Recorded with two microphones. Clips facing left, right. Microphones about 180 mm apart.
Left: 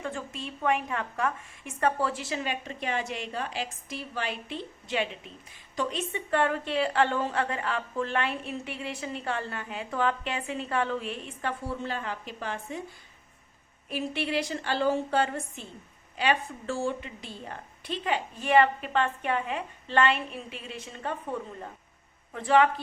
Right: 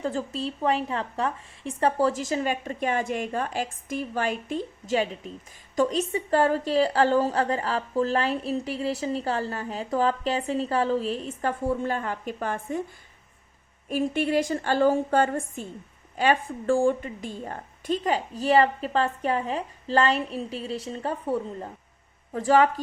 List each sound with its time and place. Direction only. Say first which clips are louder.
0.0 s a woman's voice: right 7 dB; 35° right (ahead or behind)
13.9 s a woman's voice: right 6 dB; 45° right (ahead or behind)